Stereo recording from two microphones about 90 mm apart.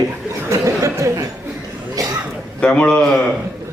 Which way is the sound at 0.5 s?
35° right (ahead or behind).